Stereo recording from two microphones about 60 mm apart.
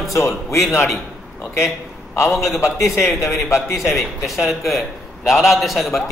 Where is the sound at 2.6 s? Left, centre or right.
Left.